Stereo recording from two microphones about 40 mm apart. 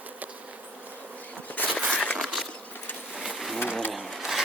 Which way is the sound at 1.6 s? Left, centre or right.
Left.